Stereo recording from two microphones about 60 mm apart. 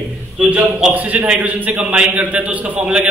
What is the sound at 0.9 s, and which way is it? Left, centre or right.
A man's voice, right.